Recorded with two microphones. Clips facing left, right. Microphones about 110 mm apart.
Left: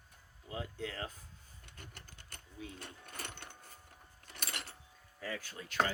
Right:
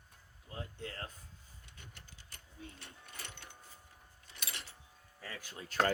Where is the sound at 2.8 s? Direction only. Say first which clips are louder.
Left 4 dB; 50° left (ahead or behind).